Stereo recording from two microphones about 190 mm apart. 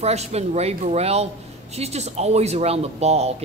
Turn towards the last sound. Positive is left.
turn(degrees=-35)  # may be behind; listen again after turning